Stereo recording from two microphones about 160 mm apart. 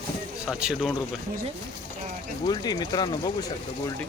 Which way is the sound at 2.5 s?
25° left (ahead or behind).